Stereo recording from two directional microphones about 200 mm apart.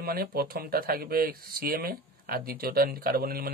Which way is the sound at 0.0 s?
50° right (ahead or behind).